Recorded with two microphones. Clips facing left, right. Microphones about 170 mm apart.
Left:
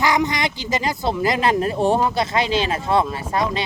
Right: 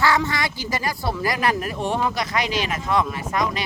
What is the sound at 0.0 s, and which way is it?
Speech, 15° left (ahead or behind).